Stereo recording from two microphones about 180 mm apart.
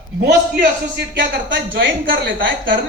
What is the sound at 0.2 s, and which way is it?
A man's voice, 65° right (ahead or behind).